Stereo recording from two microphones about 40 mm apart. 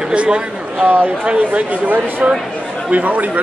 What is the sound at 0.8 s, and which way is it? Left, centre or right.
Speech, right.